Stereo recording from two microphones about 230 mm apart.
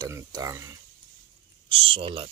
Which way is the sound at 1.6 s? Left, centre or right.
Right.